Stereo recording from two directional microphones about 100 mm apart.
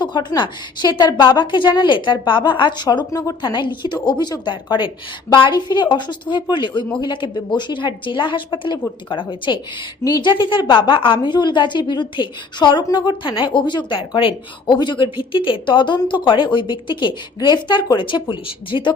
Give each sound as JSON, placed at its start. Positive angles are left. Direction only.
{"t": 0.0, "sound": "a woman's voice", "side_deg": 45}